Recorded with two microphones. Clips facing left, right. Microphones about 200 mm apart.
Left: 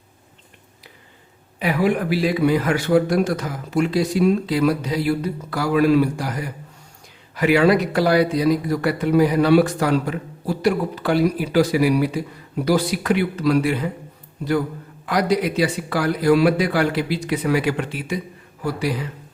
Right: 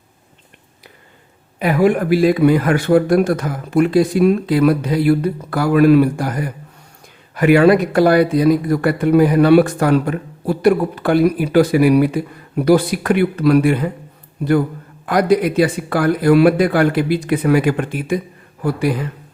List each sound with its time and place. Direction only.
1.5 s a man's voice: 50° right (ahead or behind)